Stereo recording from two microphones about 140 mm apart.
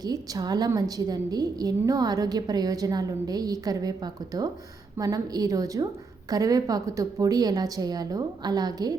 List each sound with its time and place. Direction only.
0.0 s a woman's voice: 25° right (ahead or behind)